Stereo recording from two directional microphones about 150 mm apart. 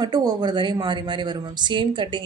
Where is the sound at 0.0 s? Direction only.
25° right (ahead or behind).